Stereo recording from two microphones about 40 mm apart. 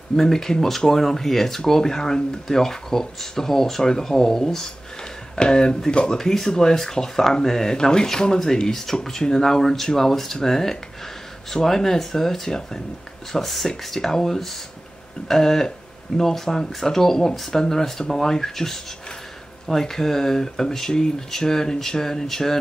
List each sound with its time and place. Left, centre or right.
0.1 s speech: centre
6.1 s speech: centre